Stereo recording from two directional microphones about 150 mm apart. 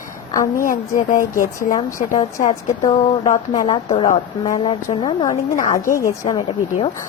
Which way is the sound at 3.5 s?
30° left (ahead or behind).